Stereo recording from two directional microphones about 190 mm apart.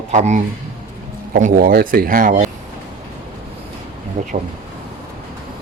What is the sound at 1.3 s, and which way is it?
A man's voice, 50° right (ahead or behind).